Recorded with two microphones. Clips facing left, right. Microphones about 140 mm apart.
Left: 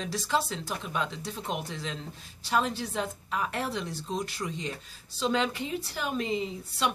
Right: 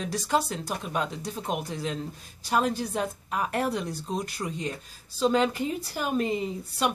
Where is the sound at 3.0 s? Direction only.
50° right (ahead or behind).